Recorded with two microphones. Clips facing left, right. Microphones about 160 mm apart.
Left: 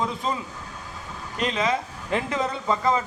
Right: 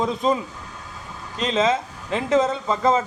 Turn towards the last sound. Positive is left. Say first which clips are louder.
# right 3 dB
turn(degrees=-25)  # may be behind; listen again after turning